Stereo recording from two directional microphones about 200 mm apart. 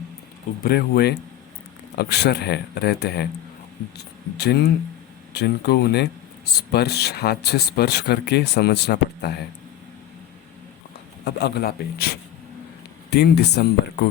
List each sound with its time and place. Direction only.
0.6 s speech: 50° left (ahead or behind)
11.3 s speech: 55° left (ahead or behind)